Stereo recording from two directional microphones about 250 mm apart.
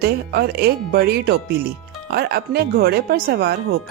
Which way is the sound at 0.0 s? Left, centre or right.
Right.